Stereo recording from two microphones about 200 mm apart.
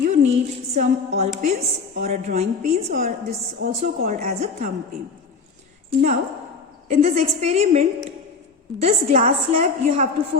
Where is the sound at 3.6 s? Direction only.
50° right (ahead or behind).